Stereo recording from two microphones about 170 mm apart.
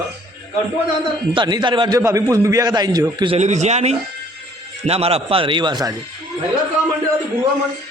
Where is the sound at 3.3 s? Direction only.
45° right (ahead or behind); by 5.9 s 25° right (ahead or behind).